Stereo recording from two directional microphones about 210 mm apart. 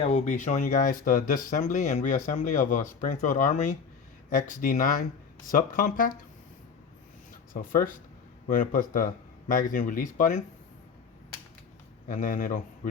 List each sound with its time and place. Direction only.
0.0 s speech: 30° left (ahead or behind)
7.5 s speech: 40° left (ahead or behind)
12.0 s speech: 40° left (ahead or behind)